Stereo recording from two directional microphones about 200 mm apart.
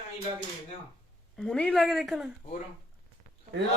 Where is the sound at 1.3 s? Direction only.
5° left (ahead or behind).